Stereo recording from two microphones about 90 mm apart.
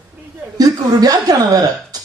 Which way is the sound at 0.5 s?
45° right (ahead or behind).